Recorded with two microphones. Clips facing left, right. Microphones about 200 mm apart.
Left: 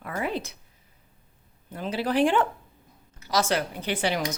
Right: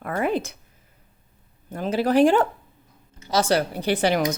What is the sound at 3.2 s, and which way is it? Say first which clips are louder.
Speech: right 4 dB; 30° right (ahead or behind).